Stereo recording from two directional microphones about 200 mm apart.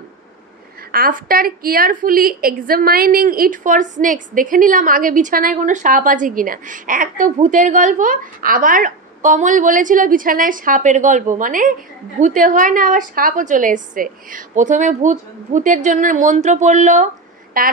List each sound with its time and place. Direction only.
0.9 s a woman's voice: 45° right (ahead or behind)